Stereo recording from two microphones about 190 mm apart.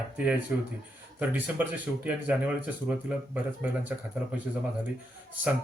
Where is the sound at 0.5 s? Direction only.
10° right (ahead or behind).